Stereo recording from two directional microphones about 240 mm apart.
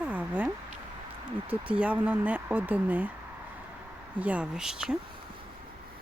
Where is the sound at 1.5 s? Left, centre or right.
Centre.